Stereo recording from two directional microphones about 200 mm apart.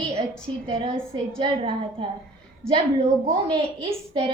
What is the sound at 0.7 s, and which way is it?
A woman's voice, 25° right (ahead or behind).